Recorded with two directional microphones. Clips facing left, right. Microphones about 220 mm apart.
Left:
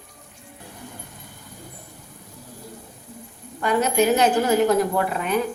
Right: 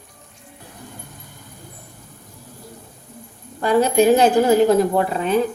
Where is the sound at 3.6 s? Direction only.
30° right (ahead or behind).